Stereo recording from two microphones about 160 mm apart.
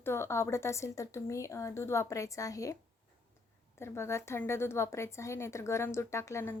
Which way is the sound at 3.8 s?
15° left (ahead or behind).